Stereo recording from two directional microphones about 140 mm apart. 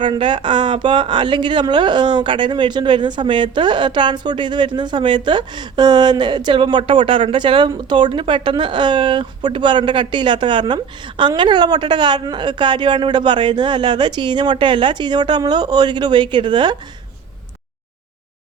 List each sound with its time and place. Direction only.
0.0 s speech: 35° right (ahead or behind)